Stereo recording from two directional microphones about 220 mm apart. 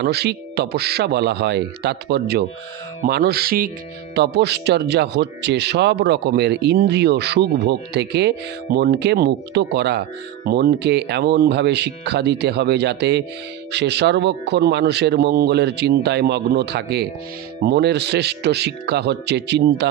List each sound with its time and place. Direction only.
0.0 s speech: 45° right (ahead or behind)